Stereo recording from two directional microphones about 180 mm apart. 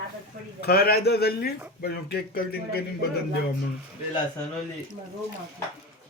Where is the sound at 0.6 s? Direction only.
60° left (ahead or behind).